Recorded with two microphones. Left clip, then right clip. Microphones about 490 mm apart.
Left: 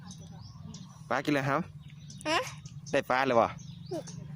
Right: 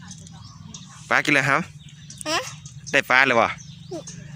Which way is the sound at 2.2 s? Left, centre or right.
Left.